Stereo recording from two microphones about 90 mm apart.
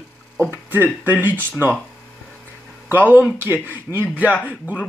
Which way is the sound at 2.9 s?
20° right (ahead or behind).